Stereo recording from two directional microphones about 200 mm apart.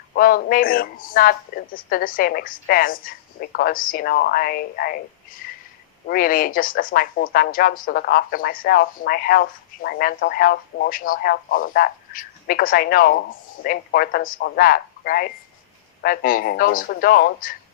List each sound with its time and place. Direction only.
0.1 s a woman's voice: 45° left (ahead or behind)
6.1 s a woman's voice: 45° left (ahead or behind)